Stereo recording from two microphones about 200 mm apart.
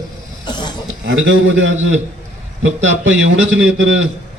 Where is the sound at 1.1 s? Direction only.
70° right (ahead or behind).